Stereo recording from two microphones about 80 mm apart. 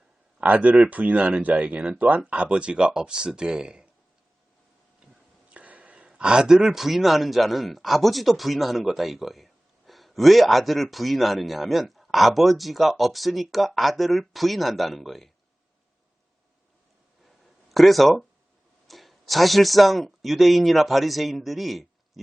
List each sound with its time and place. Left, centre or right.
0.3 s speech: centre
5.5 s speech: centre
17.2 s a sound: centre
18.9 s speech: centre